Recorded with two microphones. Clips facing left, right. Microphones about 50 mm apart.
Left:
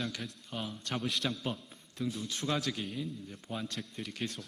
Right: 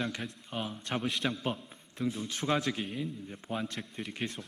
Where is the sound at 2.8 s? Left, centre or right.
Centre.